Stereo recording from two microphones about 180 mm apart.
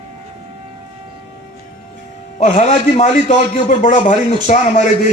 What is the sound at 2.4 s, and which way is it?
A man's voice, 40° left (ahead or behind).